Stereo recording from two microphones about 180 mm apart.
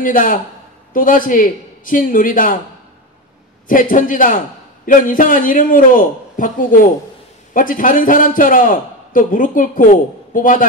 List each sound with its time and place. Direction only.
0.0 s a man's voice: 50° left (ahead or behind)
3.9 s a man's voice: 50° left (ahead or behind)